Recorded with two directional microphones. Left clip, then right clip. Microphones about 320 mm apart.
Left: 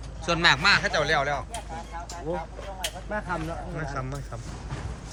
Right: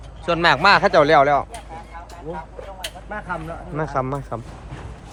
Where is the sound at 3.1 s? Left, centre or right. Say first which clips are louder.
Right 3 dB; centre.